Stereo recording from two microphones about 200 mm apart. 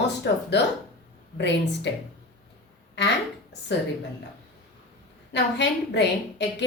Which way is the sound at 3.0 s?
60° left (ahead or behind).